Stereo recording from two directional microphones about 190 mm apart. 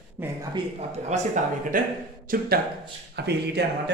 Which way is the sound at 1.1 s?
40° right (ahead or behind).